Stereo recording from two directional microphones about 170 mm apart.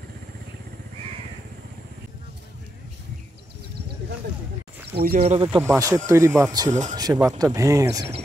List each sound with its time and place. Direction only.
4.9 s speech: 60° right (ahead or behind)
5.2 s speech: 35° right (ahead or behind)
5.6 s speech: 20° right (ahead or behind)
6.7 s speech: 45° right (ahead or behind)
7.2 s speech: 20° right (ahead or behind)